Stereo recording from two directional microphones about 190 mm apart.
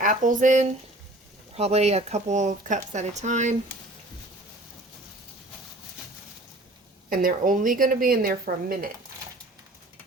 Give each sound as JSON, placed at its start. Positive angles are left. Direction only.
{"t": 0.0, "sound": "speech", "side_deg": -45}
{"t": 7.1, "sound": "speech", "side_deg": -50}